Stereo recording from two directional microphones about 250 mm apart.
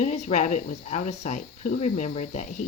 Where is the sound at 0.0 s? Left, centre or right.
Left.